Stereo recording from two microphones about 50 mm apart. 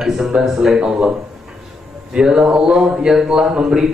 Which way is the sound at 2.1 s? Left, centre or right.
Centre.